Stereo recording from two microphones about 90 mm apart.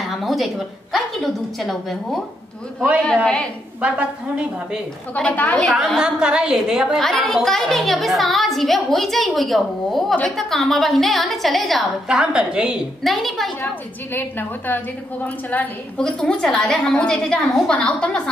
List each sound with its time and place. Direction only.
0.2 s a sound: centre (ahead or behind)
0.9 s a woman's voice: centre (ahead or behind)
3.8 s a woman's voice: 15° right (ahead or behind)
5.1 s a woman's voice: 15° left (ahead or behind)
5.9 s a woman's voice: 10° right (ahead or behind)
12.2 s a woman's voice: 10° right (ahead or behind)
13.0 s a woman's voice: centre (ahead or behind)
14.7 s a woman's voice: 20° left (ahead or behind)